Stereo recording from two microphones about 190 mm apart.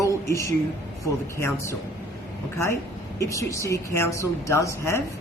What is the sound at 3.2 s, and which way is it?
A woman's voice, 15° left (ahead or behind).